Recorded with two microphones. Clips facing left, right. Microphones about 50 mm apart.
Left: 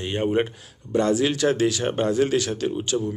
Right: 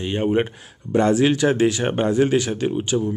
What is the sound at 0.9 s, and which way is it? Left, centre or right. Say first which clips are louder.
Speech: right 4 dB; right.